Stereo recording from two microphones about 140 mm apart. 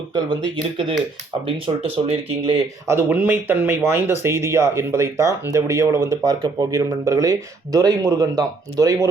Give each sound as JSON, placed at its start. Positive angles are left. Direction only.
{"t": 0.1, "sound": "speech", "side_deg": -30}
{"t": 2.8, "sound": "speech", "side_deg": -15}